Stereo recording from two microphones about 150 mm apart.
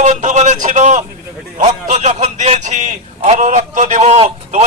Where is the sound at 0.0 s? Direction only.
50° right (ahead or behind).